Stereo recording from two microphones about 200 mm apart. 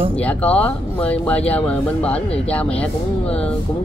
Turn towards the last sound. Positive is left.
turn(degrees=5)  # may be behind; listen again after turning